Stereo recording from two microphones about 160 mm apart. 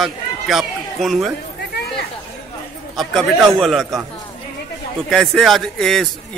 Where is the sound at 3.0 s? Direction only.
Centre (ahead or behind).